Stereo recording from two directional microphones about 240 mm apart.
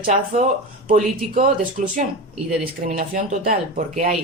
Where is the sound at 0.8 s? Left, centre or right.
Right.